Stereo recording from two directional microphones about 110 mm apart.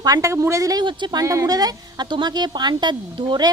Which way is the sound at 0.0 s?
30° right (ahead or behind).